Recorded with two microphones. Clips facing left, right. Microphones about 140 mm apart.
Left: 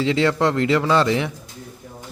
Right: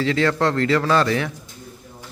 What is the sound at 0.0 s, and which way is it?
A man's voice, 20° left (ahead or behind).